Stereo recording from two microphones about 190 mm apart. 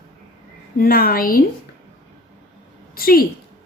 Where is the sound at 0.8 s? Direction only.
50° left (ahead or behind).